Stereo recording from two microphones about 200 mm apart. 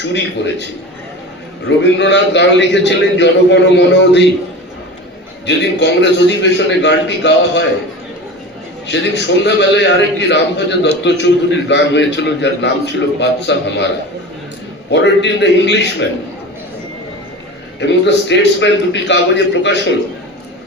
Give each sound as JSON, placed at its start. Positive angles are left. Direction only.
{"t": 0.1, "sound": "a man's voice", "side_deg": 60}
{"t": 1.6, "sound": "a man's voice", "side_deg": 60}
{"t": 5.5, "sound": "a man's voice", "side_deg": 60}
{"t": 8.9, "sound": "a man's voice", "side_deg": 60}
{"t": 17.7, "sound": "a man's voice", "side_deg": 60}